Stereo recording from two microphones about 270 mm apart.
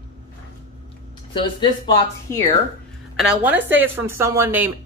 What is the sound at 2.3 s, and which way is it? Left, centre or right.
Speech, centre.